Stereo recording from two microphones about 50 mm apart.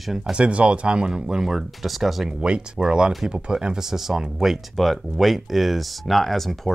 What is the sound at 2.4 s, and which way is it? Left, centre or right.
Speech, centre.